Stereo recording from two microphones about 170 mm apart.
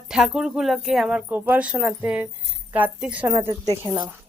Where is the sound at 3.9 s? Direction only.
30° right (ahead or behind).